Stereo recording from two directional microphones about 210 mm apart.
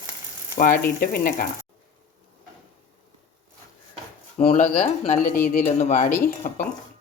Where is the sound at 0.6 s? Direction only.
40° left (ahead or behind).